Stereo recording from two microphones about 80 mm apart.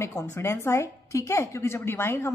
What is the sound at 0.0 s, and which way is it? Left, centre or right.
A woman's voice, left.